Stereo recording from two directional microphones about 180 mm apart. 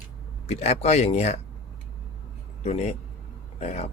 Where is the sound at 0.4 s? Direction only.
35° left (ahead or behind).